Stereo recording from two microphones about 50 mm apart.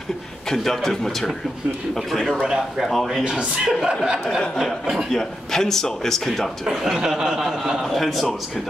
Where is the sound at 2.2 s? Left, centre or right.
Centre.